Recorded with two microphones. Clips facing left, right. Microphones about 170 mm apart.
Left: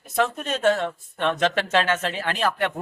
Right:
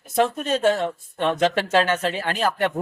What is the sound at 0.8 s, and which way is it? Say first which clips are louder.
Speech: right 2 dB; 10° right (ahead or behind).